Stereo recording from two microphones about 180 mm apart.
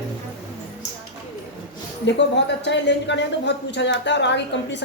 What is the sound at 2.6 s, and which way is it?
A woman's voice, 75° left (ahead or behind).